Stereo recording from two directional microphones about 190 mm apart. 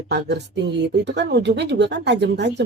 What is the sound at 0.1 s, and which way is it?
Speech, 60° right (ahead or behind).